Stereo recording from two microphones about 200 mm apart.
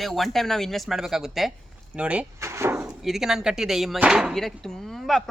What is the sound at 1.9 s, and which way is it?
Door, 5° right (ahead or behind).